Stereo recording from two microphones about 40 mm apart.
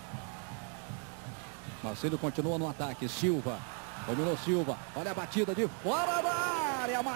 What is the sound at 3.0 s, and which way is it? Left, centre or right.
Speech, centre.